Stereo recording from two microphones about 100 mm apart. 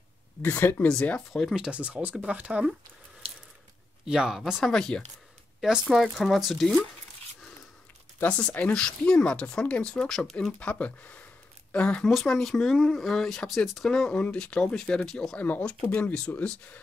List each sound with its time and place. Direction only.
0.4 s speech: 20° left (ahead or behind)
1.5 s speech: 10° right (ahead or behind)
4.1 s speech: 5° right (ahead or behind)
8.2 s speech: 10° left (ahead or behind)